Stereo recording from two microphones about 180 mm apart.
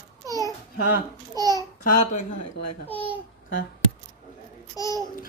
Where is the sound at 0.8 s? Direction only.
60° left (ahead or behind).